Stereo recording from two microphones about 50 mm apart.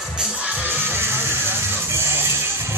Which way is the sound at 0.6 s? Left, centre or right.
Right.